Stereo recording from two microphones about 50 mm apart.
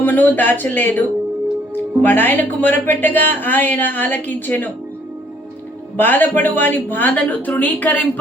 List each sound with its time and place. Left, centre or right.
0.0 s speech: left
6.0 s speech: left